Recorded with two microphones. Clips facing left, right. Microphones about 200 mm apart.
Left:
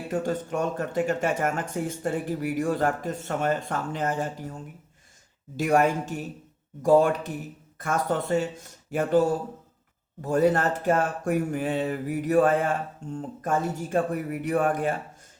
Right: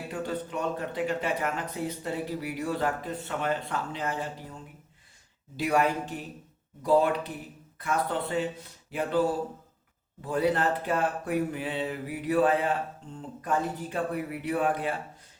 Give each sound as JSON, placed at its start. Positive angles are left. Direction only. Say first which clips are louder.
{"t": 0.1, "sound": "speech", "louder": "left 6 dB", "side_deg": 45}
{"t": 5.5, "sound": "speech", "louder": "left 4 dB", "side_deg": 45}